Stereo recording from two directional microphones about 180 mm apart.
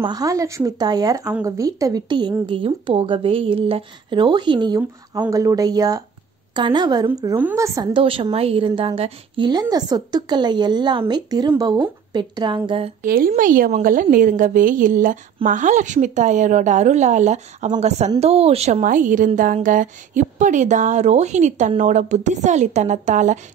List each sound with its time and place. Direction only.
0.0 s a woman's voice: 20° right (ahead or behind)
13.0 s a woman's voice: 50° right (ahead or behind)